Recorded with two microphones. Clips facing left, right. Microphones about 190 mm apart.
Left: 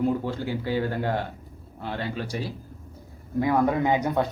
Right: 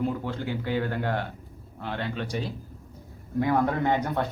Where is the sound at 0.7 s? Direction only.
35° left (ahead or behind).